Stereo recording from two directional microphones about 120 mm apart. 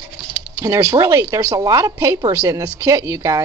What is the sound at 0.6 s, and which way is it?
A woman's voice, 25° right (ahead or behind).